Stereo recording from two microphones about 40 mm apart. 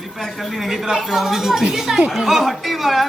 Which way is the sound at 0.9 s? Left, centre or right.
Centre.